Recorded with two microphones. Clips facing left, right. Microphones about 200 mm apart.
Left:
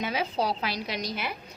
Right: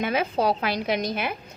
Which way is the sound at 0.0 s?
55° right (ahead or behind).